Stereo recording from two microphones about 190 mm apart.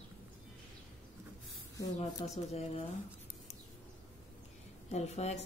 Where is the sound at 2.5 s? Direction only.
35° left (ahead or behind).